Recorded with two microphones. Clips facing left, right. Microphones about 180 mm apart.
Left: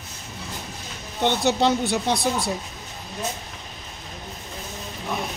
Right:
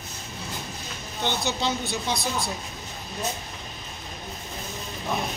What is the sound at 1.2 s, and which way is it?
Speech, 70° left (ahead or behind).